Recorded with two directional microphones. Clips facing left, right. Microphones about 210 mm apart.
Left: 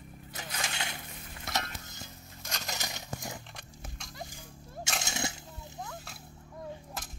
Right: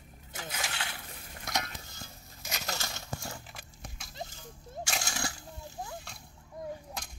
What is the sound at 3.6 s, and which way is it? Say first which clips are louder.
Horse: left 1 dB; centre (ahead or behind).